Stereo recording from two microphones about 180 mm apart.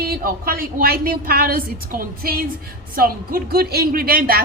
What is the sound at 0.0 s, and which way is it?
A woman's voice, 55° right (ahead or behind).